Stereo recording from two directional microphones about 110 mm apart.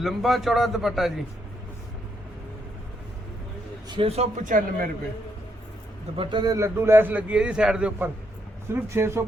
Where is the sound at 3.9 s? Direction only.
60° right (ahead or behind).